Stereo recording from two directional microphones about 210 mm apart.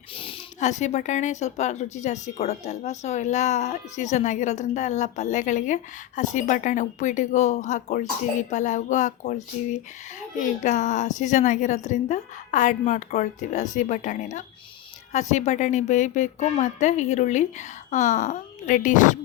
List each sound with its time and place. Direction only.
0.2 s speech: 30° left (ahead or behind)